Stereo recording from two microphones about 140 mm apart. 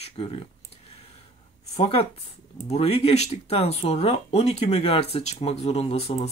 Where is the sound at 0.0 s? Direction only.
40° left (ahead or behind).